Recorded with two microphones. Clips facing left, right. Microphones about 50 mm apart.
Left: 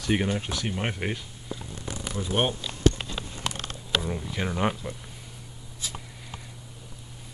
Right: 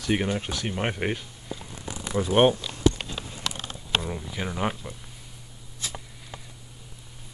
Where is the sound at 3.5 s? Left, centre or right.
Left.